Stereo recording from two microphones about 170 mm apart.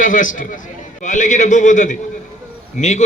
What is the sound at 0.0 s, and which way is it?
A man's voice, 50° left (ahead or behind).